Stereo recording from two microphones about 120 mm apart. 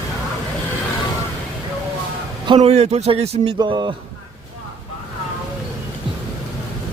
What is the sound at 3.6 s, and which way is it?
Speech, 35° right (ahead or behind).